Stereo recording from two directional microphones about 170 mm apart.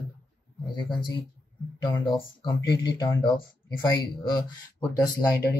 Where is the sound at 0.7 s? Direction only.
25° left (ahead or behind).